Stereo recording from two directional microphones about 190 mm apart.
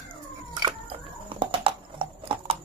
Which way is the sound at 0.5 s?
25° right (ahead or behind).